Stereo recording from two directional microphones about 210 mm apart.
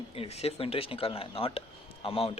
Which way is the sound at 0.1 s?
30° left (ahead or behind).